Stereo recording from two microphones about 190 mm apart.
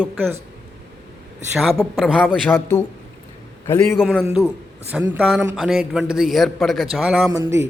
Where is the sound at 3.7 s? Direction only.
10° left (ahead or behind).